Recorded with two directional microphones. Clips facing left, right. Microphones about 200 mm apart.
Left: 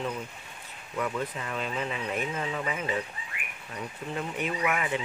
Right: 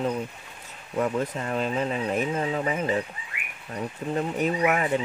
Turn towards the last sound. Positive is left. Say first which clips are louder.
# right 6 dB
turn(degrees=-40)  # may be behind; listen again after turning